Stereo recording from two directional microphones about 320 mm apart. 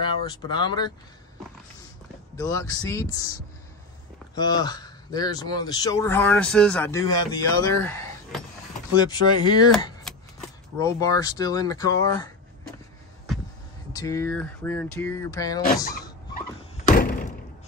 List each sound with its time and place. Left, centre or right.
0.5 s speech: centre
2.3 s speech: centre
4.4 s speech: centre
13.9 s speech: centre
16.8 s a sound: left